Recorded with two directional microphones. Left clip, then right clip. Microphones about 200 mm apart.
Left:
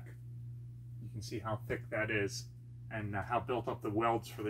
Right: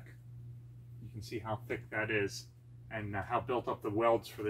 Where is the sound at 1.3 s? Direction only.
5° left (ahead or behind).